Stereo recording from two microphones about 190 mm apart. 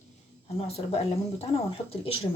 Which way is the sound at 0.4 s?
30° left (ahead or behind).